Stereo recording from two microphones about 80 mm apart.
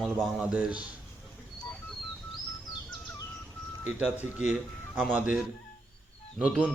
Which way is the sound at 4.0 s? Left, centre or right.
Centre.